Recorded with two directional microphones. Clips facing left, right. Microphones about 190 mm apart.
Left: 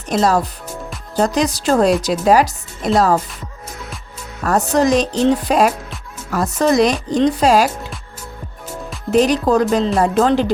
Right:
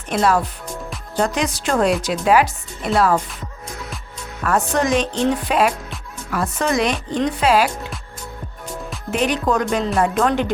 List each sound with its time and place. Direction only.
0.1 s speech: 40° left (ahead or behind)
4.4 s speech: 40° left (ahead or behind)
9.0 s speech: 35° left (ahead or behind)